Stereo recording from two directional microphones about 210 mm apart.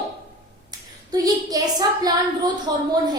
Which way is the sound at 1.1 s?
15° right (ahead or behind).